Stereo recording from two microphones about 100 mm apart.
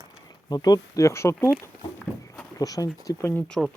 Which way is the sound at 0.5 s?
40° left (ahead or behind).